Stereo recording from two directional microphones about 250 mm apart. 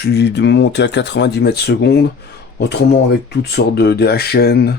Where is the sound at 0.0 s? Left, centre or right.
Left.